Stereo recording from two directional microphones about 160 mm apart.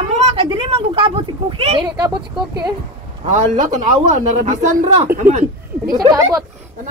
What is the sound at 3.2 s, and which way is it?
Speech, 50° right (ahead or behind).